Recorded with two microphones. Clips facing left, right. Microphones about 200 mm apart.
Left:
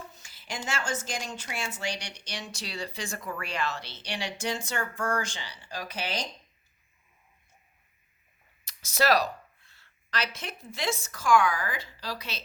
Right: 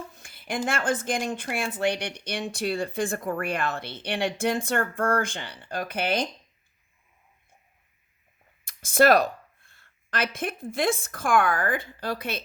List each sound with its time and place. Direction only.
0.1 s a woman's voice: 55° right (ahead or behind)
8.6 s speech: 50° right (ahead or behind)